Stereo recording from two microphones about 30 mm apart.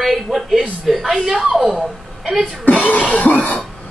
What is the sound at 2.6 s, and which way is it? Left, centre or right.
Speech, left.